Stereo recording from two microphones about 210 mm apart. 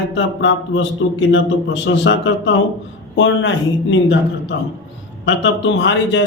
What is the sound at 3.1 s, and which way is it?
Speech, 60° left (ahead or behind).